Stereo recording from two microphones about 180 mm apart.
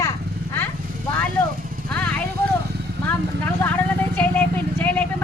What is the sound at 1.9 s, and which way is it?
Vehicle, 5° left (ahead or behind).